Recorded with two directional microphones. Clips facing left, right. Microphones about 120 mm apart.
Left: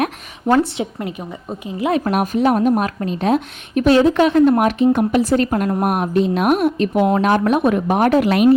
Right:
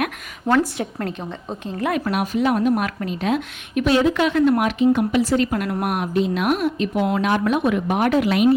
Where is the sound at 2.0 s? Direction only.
45° left (ahead or behind).